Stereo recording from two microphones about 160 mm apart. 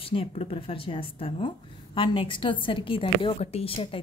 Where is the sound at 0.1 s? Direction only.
35° left (ahead or behind).